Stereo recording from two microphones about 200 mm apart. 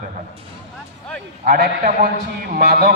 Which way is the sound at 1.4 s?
45° right (ahead or behind).